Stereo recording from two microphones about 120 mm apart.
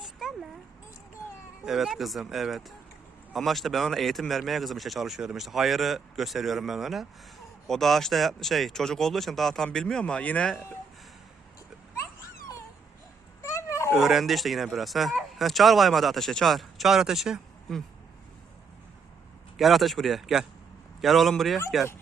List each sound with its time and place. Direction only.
0.0 s a sound: 5° right (ahead or behind)
1.6 s speech: 5° right (ahead or behind)
13.4 s dog: 25° left (ahead or behind)
14.0 s speech: centre (ahead or behind)
19.5 s speech: centre (ahead or behind)